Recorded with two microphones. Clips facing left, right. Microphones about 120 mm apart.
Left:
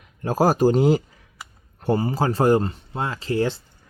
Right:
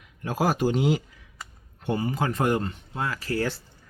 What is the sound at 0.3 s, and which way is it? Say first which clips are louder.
Speech: left 6 dB; 40° left (ahead or behind).